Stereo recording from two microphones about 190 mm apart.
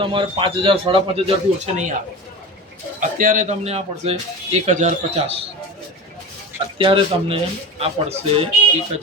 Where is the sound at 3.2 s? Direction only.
45° right (ahead or behind).